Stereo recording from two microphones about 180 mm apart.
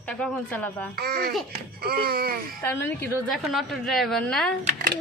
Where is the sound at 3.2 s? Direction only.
Centre (ahead or behind).